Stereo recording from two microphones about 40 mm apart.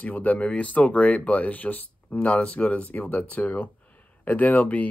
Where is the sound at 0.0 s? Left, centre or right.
Left.